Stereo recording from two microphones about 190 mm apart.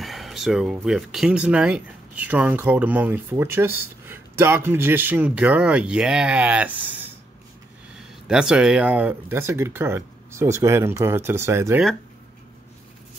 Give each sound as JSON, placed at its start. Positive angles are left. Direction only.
{"t": 0.0, "sound": "speech", "side_deg": 0}
{"t": 8.3, "sound": "speech", "side_deg": -5}